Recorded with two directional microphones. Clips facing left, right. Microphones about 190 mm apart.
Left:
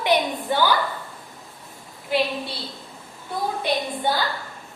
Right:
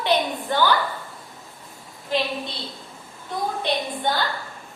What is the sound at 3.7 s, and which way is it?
Speech, 10° left (ahead or behind).